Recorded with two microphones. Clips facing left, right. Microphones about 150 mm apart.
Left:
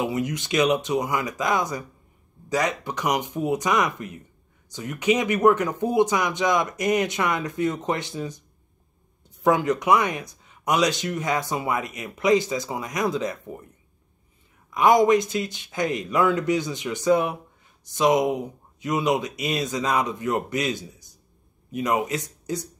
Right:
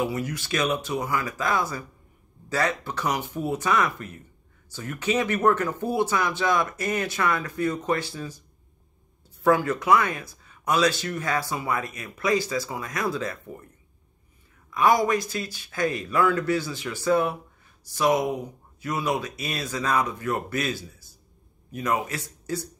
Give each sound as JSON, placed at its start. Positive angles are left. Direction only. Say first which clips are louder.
{"t": 0.0, "sound": "speech", "louder": "left 2 dB", "side_deg": 20}
{"t": 9.4, "sound": "speech", "louder": "left 1 dB", "side_deg": 20}
{"t": 14.7, "sound": "speech", "louder": "left 4 dB", "side_deg": 20}